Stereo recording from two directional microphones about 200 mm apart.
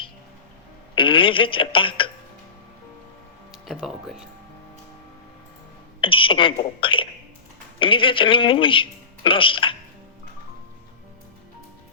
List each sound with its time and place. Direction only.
0.9 s a woman's voice: 25° left (ahead or behind)
3.5 s speech: centre (ahead or behind)
6.0 s speech: 25° left (ahead or behind)